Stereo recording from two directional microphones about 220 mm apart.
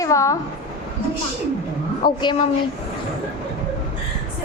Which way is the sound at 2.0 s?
20° left (ahead or behind).